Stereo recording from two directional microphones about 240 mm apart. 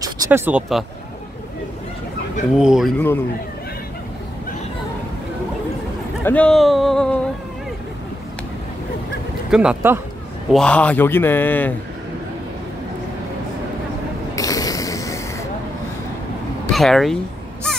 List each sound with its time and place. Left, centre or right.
0.0 s speech: centre
2.5 s speech: centre
6.2 s speech: centre
9.5 s speech: centre
14.3 s a sound: centre
16.7 s speech: centre